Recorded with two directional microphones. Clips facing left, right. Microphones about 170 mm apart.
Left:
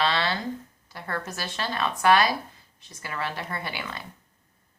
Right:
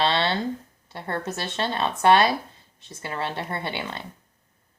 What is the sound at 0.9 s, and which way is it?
Speech, 25° right (ahead or behind).